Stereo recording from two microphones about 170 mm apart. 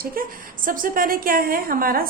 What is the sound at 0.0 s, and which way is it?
A woman's voice, 60° right (ahead or behind).